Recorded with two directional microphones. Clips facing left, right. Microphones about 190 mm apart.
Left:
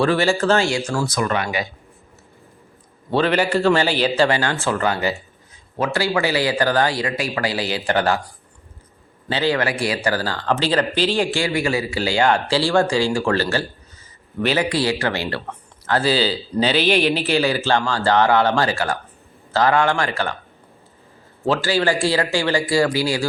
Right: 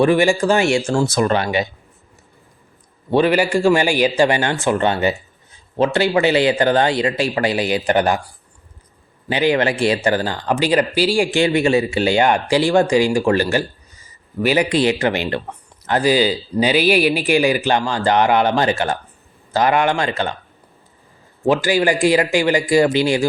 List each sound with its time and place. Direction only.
0.0 s speech: 15° right (ahead or behind); by 1.6 s 30° right (ahead or behind)
3.1 s a man's voice: 10° right (ahead or behind)
9.3 s a man's voice: 15° right (ahead or behind)
11.3 s a man's voice: 25° right (ahead or behind)
21.4 s a man's voice: 15° right (ahead or behind)